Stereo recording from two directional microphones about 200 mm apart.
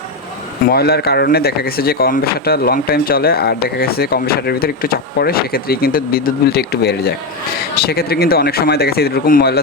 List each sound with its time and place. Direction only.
0.6 s speech: 50° left (ahead or behind)